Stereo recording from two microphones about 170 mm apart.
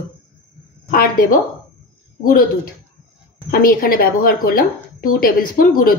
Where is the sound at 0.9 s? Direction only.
60° left (ahead or behind).